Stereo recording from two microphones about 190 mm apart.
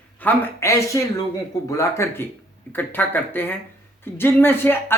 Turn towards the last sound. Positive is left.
turn(degrees=10)  # may be behind; listen again after turning